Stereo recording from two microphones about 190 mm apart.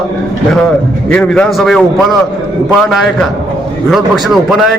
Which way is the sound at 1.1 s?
5° left (ahead or behind).